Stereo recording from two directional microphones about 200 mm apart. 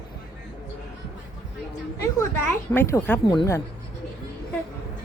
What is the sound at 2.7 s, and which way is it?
Speech, 15° left (ahead or behind).